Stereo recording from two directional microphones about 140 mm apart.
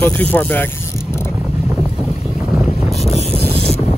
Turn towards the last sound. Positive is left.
turn(degrees=50)  # may be behind; listen again after turning